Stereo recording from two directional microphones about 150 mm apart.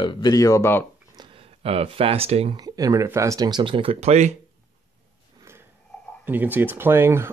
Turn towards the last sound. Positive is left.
turn(degrees=-15)  # may be behind; listen again after turning